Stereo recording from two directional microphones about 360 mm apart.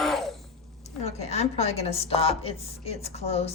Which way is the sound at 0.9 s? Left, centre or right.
Centre.